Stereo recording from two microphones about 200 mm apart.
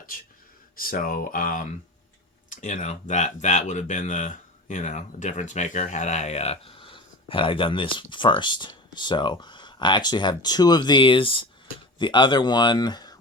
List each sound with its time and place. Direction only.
0.8 s speech: 45° left (ahead or behind); by 13.1 s 20° left (ahead or behind)